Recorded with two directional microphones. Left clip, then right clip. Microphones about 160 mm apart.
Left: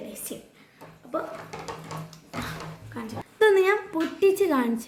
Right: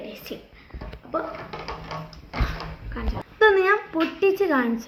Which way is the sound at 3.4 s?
55° left (ahead or behind).